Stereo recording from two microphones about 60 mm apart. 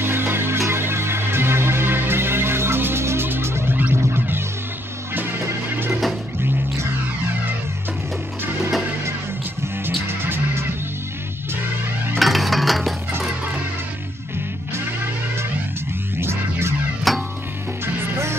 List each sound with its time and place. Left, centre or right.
0.0 s music: right
9.8 s music: right
12.2 s music: centre
16.2 s music: right
17.1 s music: centre